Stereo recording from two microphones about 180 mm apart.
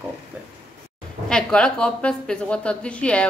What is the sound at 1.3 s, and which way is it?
A woman's voice, 5° left (ahead or behind).